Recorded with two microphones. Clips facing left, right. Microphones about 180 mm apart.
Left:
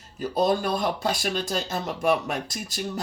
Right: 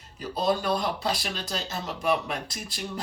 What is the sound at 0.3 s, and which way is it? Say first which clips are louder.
Speech: left 2 dB; 45° left (ahead or behind).